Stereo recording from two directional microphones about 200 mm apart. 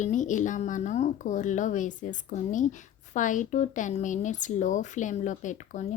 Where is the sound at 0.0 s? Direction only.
40° left (ahead or behind).